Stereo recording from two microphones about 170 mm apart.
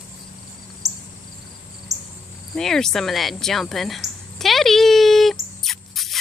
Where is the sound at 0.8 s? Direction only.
40° right (ahead or behind).